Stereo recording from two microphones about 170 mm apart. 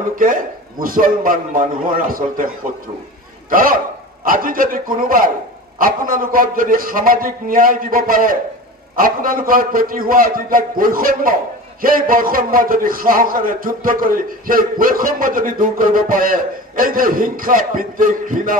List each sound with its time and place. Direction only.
0.2 s a man's voice: 55° right (ahead or behind)